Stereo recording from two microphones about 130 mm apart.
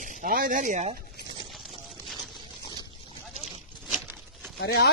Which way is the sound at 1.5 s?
Centre (ahead or behind).